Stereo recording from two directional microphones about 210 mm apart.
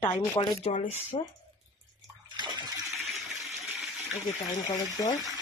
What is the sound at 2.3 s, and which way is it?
Bathtub, 20° right (ahead or behind).